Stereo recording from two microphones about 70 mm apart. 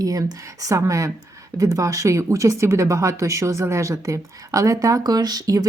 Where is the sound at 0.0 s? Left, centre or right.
Right.